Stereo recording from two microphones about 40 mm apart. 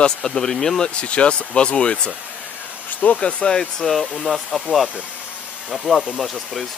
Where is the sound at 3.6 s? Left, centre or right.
Centre.